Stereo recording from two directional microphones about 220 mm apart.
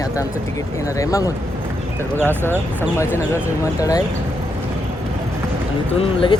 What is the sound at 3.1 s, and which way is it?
Speech, 10° left (ahead or behind).